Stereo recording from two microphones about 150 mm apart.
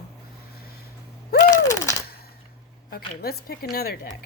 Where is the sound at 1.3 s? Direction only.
55° left (ahead or behind).